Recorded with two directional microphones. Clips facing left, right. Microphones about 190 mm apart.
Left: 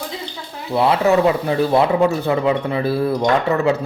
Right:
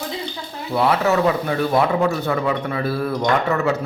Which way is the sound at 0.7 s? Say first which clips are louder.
Left 3 dB; 25° left (ahead or behind).